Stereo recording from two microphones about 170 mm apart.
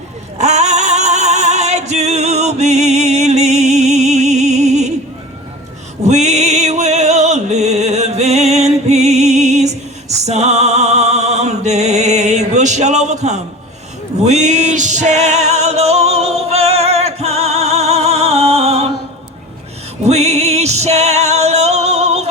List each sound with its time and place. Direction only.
0.3 s female singing: 40° right (ahead or behind)
6.1 s music: 40° right (ahead or behind)
20.1 s music: 40° right (ahead or behind)